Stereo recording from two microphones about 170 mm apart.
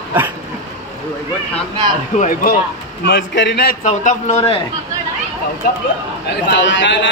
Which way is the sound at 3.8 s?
45° left (ahead or behind).